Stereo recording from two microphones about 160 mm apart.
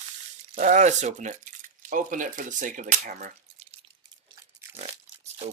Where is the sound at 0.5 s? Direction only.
55° right (ahead or behind).